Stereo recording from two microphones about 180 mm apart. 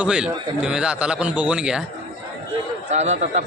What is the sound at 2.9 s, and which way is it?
Speech, 40° right (ahead or behind).